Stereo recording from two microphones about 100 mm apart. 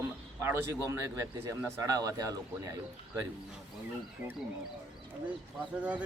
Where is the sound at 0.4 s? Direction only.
25° right (ahead or behind).